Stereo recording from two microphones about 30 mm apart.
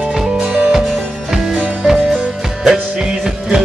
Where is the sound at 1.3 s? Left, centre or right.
Centre.